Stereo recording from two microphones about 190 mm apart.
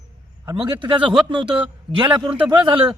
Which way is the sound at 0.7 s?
25° right (ahead or behind).